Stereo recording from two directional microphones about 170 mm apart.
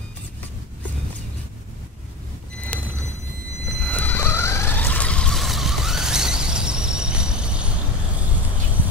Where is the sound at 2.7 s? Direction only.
10° left (ahead or behind).